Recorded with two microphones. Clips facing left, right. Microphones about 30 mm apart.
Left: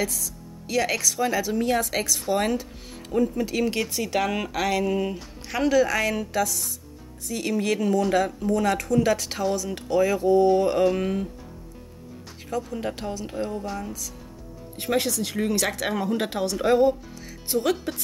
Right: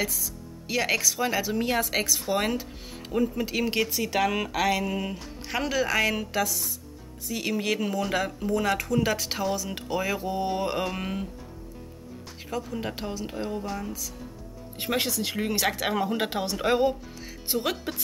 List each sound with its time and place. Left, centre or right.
0.7 s speech: centre
12.4 s speech: centre
14.8 s speech: centre